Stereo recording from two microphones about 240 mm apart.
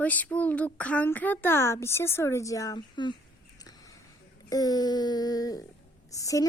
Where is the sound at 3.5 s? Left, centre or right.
Centre.